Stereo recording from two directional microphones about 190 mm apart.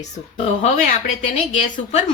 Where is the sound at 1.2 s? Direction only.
40° left (ahead or behind).